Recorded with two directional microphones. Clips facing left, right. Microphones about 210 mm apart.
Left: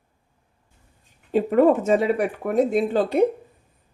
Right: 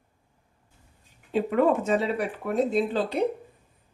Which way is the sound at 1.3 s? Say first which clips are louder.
Left 5 dB; 45° left (ahead or behind).